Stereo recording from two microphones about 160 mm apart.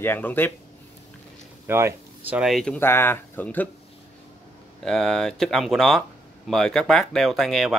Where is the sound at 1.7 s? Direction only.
15° right (ahead or behind); by 3.6 s 10° left (ahead or behind).